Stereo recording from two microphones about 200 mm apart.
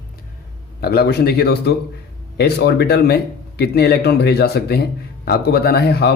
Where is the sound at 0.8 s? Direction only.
50° left (ahead or behind).